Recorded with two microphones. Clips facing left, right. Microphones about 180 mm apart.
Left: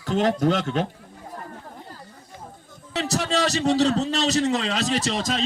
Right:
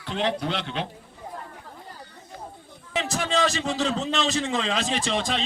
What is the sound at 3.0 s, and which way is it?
A man's voice, 40° left (ahead or behind).